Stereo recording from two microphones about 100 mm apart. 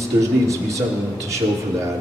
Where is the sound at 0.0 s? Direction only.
30° right (ahead or behind).